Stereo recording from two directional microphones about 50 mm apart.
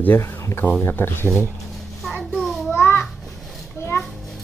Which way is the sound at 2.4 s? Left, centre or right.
Centre.